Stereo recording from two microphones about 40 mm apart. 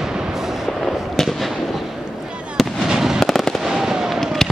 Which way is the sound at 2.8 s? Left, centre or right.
Centre.